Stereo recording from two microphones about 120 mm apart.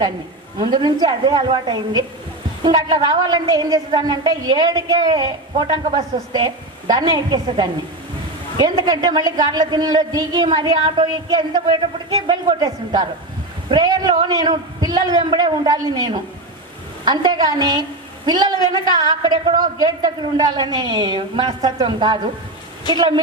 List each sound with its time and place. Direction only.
0.6 s a woman's voice: 40° right (ahead or behind)